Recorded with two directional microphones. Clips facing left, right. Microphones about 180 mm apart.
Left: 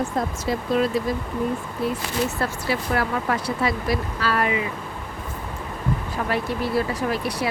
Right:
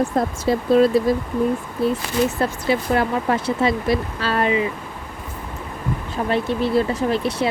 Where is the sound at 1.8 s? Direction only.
20° right (ahead or behind).